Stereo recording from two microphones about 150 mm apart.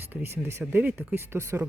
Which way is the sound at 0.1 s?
15° right (ahead or behind).